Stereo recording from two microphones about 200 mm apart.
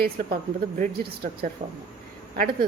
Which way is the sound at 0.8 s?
50° right (ahead or behind).